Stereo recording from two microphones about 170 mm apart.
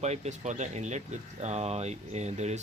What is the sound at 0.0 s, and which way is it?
Speech, 40° right (ahead or behind).